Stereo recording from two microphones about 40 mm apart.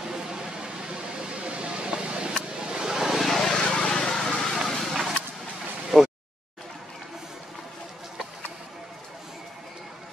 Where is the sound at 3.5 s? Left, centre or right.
Centre.